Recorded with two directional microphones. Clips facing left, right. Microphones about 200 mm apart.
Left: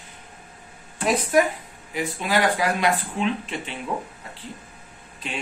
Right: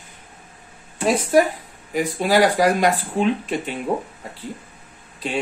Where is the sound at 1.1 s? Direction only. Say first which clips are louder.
Right 3 dB; 35° right (ahead or behind).